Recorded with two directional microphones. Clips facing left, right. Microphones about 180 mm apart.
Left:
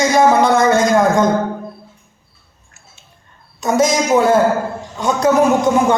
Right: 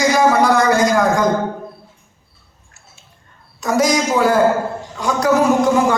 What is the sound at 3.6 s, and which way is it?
A woman's voice, 25° left (ahead or behind).